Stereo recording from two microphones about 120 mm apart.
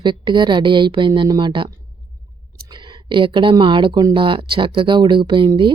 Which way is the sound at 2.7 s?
40° right (ahead or behind).